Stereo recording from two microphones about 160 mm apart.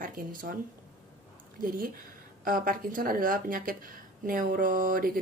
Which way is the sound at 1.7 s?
60° right (ahead or behind).